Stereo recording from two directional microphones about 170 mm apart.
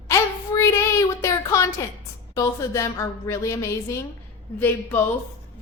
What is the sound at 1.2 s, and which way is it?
A woman's voice, 20° left (ahead or behind).